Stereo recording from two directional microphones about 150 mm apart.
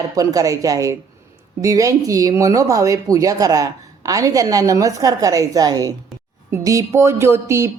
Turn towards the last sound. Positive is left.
turn(degrees=-20)  # may be behind; listen again after turning